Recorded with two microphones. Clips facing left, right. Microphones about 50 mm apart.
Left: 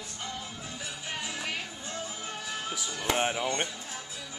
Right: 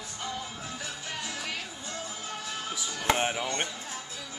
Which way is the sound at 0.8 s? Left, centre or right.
Centre.